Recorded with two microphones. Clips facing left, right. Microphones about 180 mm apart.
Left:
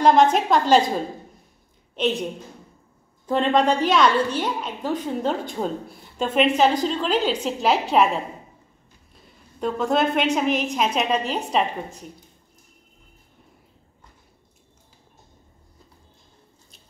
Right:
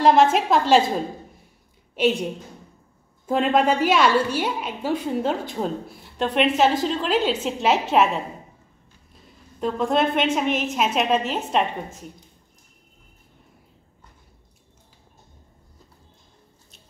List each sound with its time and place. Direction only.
0.0 s a woman's voice: 5° right (ahead or behind)
2.0 s a woman's voice: 10° right (ahead or behind)
3.3 s a woman's voice: 10° right (ahead or behind)
9.1 s a sound: centre (ahead or behind)
10.3 s a woman's voice: centre (ahead or behind)